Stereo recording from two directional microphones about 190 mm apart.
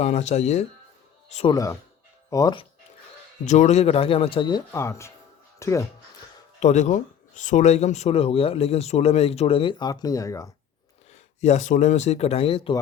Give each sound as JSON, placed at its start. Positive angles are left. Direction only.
{"t": 0.0, "sound": "speech", "side_deg": 35}
{"t": 1.5, "sound": "speech", "side_deg": 15}
{"t": 3.4, "sound": "speech", "side_deg": 40}
{"t": 6.6, "sound": "speech", "side_deg": 40}
{"t": 11.1, "sound": "speech", "side_deg": 35}